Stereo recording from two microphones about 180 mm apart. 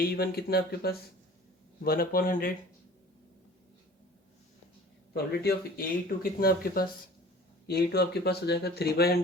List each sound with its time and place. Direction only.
0.0 s a man's voice: 60° left (ahead or behind)
5.1 s speech: 60° left (ahead or behind)